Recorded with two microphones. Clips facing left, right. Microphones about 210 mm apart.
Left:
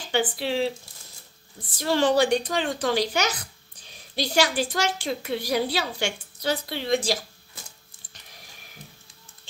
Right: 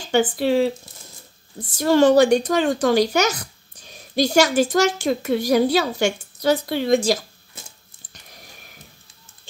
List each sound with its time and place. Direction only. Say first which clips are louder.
0.1 s a woman's voice: right 7 dB; 45° right (ahead or behind)